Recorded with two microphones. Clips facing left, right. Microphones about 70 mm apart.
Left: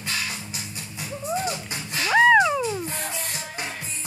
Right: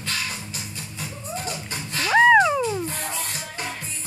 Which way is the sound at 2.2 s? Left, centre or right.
Centre.